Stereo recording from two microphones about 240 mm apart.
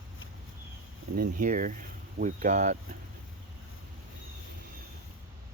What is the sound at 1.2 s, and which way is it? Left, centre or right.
Speech, right.